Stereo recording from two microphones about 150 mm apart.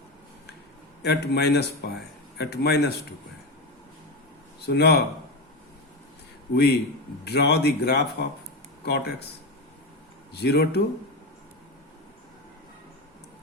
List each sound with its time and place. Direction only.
1.0 s speech: 90° left
4.6 s speech: 90° left
6.5 s speech: 90° left
10.3 s speech: 90° left